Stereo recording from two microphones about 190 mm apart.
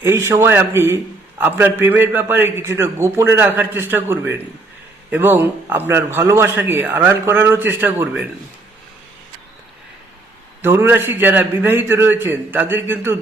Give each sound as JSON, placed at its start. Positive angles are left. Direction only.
{"t": 0.0, "sound": "a man's voice", "side_deg": -15}
{"t": 10.6, "sound": "a man's voice", "side_deg": -10}